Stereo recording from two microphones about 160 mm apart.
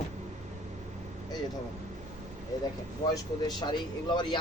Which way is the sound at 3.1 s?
25° left (ahead or behind).